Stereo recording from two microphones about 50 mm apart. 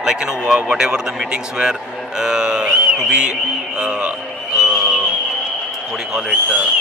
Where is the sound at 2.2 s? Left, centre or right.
Centre.